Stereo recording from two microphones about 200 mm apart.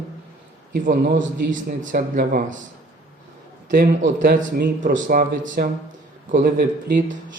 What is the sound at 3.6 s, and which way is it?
A man's voice, 45° right (ahead or behind).